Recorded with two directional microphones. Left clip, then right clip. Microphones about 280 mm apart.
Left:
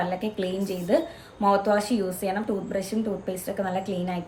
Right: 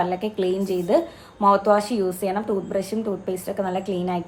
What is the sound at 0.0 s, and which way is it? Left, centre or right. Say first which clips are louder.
A woman's voice: right 5 dB; centre.